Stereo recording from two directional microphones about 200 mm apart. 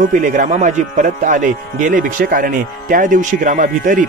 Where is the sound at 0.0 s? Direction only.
40° right (ahead or behind).